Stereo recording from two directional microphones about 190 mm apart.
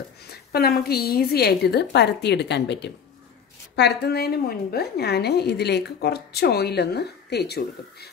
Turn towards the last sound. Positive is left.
turn(degrees=60)  # may be behind; listen again after turning